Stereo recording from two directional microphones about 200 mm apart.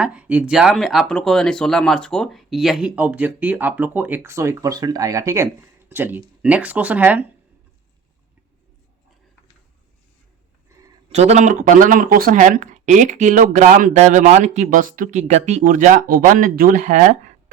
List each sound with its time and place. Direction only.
0.0 s speech: 5° right (ahead or behind)
11.1 s speech: 30° right (ahead or behind)